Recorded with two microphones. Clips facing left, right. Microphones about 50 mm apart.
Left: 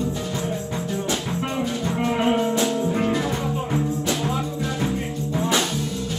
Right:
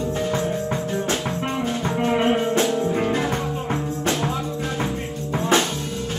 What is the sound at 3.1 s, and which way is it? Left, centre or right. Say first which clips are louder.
Music: right 1 dB; right.